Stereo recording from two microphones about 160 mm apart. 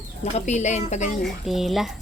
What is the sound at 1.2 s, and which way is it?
Speech, centre (ahead or behind).